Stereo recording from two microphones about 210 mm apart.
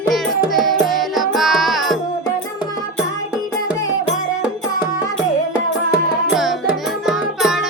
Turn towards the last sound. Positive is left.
turn(degrees=0)  # may be behind; listen again after turning